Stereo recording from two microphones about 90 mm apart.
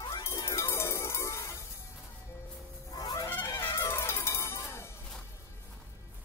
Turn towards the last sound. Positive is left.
turn(degrees=30)  # may be behind; listen again after turning